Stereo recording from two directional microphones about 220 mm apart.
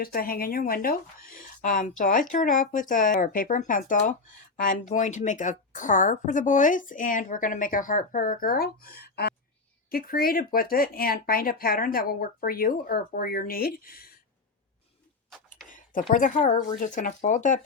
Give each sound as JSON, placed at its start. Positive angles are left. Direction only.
{"t": 0.0, "sound": "a woman's voice", "side_deg": 40}
{"t": 1.4, "sound": "a sound", "side_deg": 40}
{"t": 2.0, "sound": "a woman's voice", "side_deg": 35}
{"t": 15.7, "sound": "speech", "side_deg": 35}
{"t": 16.4, "sound": "speech", "side_deg": 20}
{"t": 16.8, "sound": "a woman's voice", "side_deg": 35}